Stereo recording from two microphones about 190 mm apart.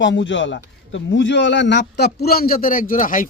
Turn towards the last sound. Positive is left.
turn(degrees=45)  # may be behind; listen again after turning